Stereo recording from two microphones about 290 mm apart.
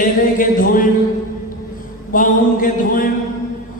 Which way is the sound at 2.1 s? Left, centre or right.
Left.